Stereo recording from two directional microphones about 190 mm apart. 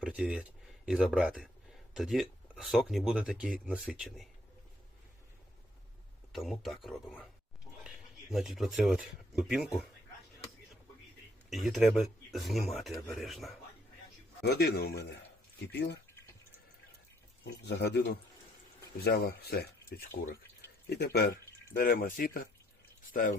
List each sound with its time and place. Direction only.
0.0 s speech: 5° right (ahead or behind)
6.3 s speech: centre (ahead or behind)
11.4 s speech: centre (ahead or behind)
14.4 s speech: 55° left (ahead or behind)
17.4 s speech: 60° left (ahead or behind)